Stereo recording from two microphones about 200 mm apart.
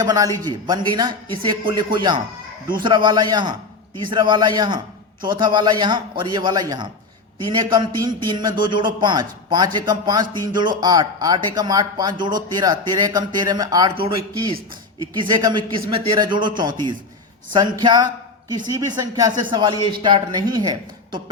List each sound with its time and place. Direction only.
0.0 s speech: 20° right (ahead or behind)
13.9 s speech: 50° right (ahead or behind)
15.2 s speech: 20° right (ahead or behind)